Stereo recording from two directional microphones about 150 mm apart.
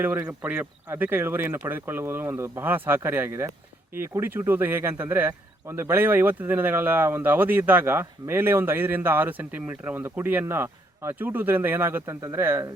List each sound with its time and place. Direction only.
0.0 s speech: 15° right (ahead or behind)